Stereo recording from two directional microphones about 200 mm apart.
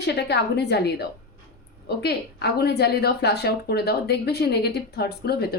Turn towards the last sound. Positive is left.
turn(degrees=55)  # may be behind; listen again after turning